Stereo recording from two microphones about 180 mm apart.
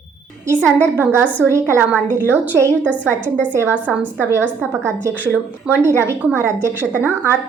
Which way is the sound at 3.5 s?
10° right (ahead or behind).